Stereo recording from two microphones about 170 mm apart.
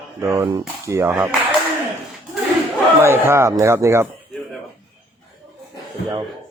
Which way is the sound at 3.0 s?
15° right (ahead or behind).